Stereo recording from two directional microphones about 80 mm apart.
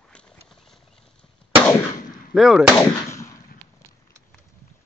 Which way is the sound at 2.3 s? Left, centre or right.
Centre.